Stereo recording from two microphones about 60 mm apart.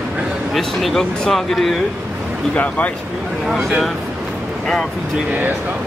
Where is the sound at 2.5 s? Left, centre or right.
Left.